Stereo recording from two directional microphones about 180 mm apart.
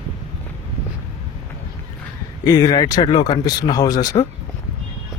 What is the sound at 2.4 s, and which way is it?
Speech, 20° left (ahead or behind).